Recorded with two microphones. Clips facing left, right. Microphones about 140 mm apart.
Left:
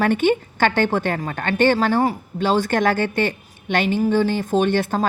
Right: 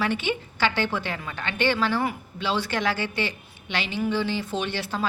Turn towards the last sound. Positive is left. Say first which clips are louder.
# left 9 dB
turn(degrees=50)  # may be behind; listen again after turning